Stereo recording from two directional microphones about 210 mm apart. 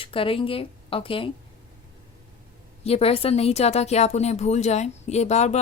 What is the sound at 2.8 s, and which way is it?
Speech, 30° left (ahead or behind).